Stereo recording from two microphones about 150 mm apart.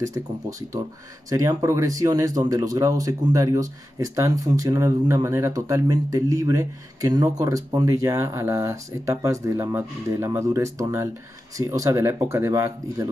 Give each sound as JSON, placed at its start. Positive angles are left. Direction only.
{"t": 0.0, "sound": "speech", "side_deg": -20}